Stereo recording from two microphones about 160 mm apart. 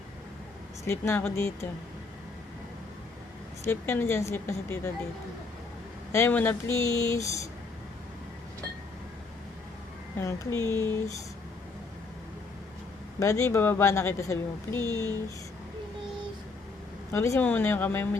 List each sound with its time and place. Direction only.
0.9 s speech: 15° left (ahead or behind)
3.6 s speech: 15° left (ahead or behind)
6.1 s speech: 15° left (ahead or behind)
10.2 s speech: 20° left (ahead or behind)
13.1 s speech: 20° left (ahead or behind)
17.1 s speech: 15° left (ahead or behind)